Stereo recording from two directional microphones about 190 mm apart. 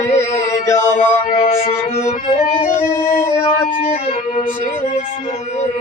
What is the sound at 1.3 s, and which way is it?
Music, 30° left (ahead or behind).